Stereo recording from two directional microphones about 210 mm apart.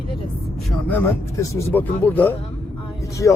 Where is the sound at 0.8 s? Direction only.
10° left (ahead or behind).